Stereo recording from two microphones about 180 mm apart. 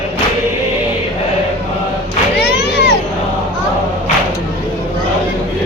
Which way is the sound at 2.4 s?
65° left (ahead or behind).